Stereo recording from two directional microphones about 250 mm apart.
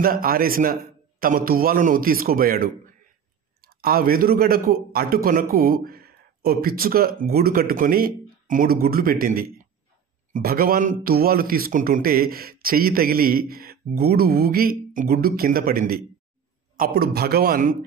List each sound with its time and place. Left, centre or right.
0.0 s a man's voice: right